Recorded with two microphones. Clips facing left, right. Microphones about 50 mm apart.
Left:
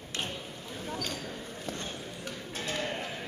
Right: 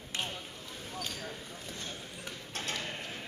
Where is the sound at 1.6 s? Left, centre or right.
Left.